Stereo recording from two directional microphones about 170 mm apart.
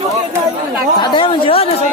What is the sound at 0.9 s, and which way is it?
Speech, 25° left (ahead or behind).